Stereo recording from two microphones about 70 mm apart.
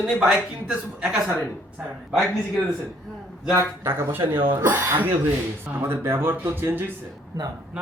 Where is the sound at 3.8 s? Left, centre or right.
Right.